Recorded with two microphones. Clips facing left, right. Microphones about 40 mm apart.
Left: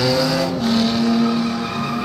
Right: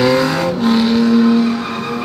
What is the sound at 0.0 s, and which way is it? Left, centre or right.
Vehicle, right.